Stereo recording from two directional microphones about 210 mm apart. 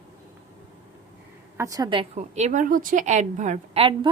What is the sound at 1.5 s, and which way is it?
A woman's voice, 15° right (ahead or behind).